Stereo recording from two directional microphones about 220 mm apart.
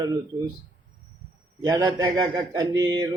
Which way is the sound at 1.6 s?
15° right (ahead or behind).